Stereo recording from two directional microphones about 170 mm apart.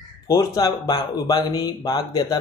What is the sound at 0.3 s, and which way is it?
Speech, 20° left (ahead or behind).